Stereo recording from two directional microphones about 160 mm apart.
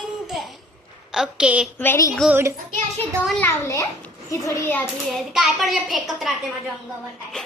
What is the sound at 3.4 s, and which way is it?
A child's voice, 15° left (ahead or behind).